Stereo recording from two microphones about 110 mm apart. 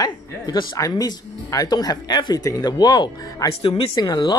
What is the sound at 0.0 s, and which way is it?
Speech, 40° left (ahead or behind).